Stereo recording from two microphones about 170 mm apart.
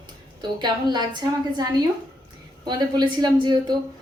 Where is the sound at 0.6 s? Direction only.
25° right (ahead or behind).